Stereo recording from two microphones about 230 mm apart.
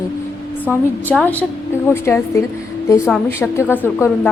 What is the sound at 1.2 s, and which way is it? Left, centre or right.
A woman's voice, centre.